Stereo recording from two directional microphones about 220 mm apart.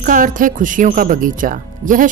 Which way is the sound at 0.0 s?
35° right (ahead or behind).